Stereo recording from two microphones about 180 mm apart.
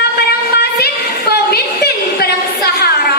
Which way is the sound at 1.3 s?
60° left (ahead or behind).